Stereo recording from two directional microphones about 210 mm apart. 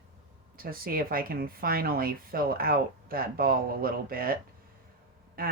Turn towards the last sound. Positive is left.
turn(degrees=-45)  # may be behind; listen again after turning